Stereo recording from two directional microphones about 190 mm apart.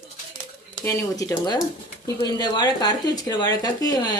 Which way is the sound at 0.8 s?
15° left (ahead or behind).